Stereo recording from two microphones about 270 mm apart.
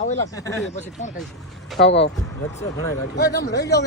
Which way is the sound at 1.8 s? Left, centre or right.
Left.